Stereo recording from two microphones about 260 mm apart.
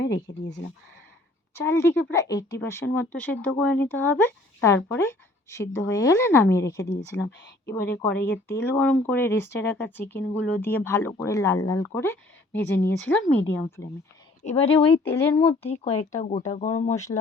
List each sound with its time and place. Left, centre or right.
1.5 s speech: centre
14.4 s speech: left
15.0 s speech: centre
15.4 s speech: left